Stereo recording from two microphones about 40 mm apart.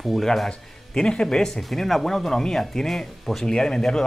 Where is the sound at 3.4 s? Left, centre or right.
Centre.